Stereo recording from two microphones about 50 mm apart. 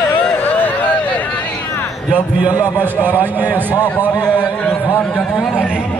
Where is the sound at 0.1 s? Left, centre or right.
Left.